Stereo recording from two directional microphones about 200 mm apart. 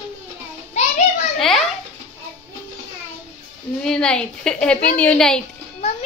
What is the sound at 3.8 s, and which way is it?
A woman's voice, 5° left (ahead or behind).